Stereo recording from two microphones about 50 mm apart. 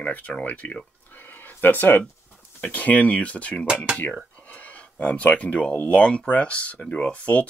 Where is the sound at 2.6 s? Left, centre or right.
Left.